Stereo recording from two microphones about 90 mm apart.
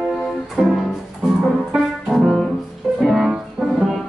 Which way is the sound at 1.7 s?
5° right (ahead or behind).